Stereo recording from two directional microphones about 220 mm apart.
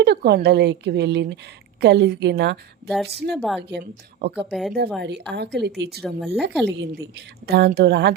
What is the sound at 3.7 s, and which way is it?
A woman's voice, 50° right (ahead or behind).